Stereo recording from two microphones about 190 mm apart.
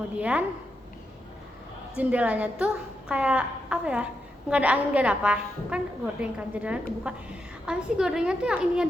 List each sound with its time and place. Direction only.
0.2 s a woman's voice: 5° right (ahead or behind)
2.0 s a woman's voice: 5° right (ahead or behind)